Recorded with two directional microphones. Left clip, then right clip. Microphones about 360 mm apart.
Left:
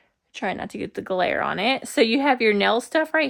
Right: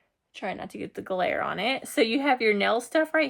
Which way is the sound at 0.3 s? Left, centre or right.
Left.